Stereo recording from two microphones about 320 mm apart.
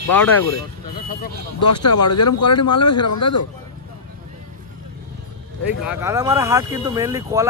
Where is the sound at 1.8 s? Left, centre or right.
Left.